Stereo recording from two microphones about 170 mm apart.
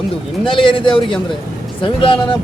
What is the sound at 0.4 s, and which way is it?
Speech, 30° left (ahead or behind).